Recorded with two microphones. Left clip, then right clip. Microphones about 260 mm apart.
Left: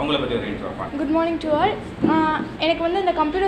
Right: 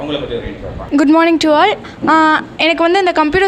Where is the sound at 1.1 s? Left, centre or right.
Right.